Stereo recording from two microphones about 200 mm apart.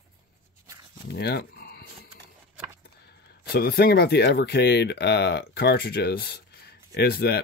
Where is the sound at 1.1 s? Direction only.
55° left (ahead or behind).